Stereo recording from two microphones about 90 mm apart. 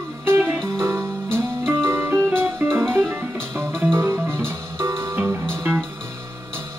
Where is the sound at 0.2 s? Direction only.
25° right (ahead or behind).